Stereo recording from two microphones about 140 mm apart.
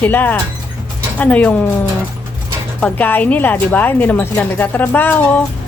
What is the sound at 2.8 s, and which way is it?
A woman's voice, 10° left (ahead or behind).